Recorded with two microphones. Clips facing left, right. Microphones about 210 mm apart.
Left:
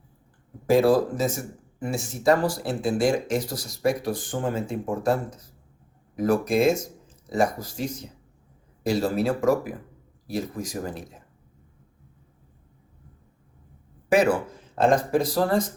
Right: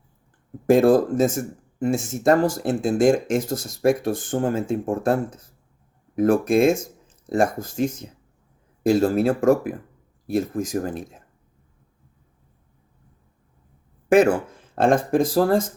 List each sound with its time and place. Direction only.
0.7 s speech: 50° right (ahead or behind)
14.1 s speech: 50° right (ahead or behind)